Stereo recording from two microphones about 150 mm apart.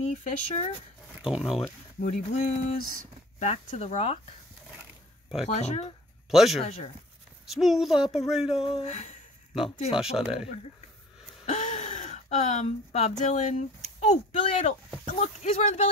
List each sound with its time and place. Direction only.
0.1 s speech: 55° left (ahead or behind)
1.2 s speech: 5° right (ahead or behind)
2.0 s speech: 60° left (ahead or behind)
3.3 s speech: 50° left (ahead or behind)
5.4 s speech: 45° left (ahead or behind)
6.3 s speech: centre (ahead or behind)
6.6 s speech: 45° left (ahead or behind)
7.4 s speech: centre (ahead or behind)
8.6 s speech: 45° left (ahead or behind)
10.1 s speech: 5° right (ahead or behind)
11.4 s gasp: 50° left (ahead or behind)
13.2 s speech: 55° left (ahead or behind)